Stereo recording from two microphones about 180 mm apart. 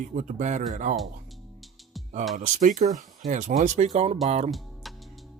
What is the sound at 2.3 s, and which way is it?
Speech, 45° right (ahead or behind).